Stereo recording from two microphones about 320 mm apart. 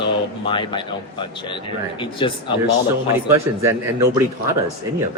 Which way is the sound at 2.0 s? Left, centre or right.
Centre.